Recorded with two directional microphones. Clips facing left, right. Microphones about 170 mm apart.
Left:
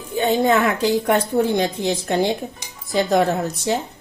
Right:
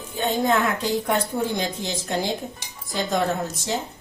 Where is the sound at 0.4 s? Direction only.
75° left (ahead or behind).